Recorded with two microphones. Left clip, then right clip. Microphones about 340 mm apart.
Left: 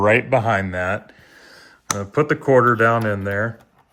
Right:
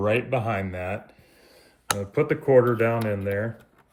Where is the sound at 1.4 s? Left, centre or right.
Left.